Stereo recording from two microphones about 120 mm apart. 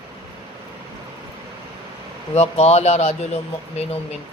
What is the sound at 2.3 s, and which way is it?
Speech, 65° left (ahead or behind).